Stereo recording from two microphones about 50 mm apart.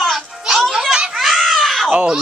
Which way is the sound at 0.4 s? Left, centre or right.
Centre.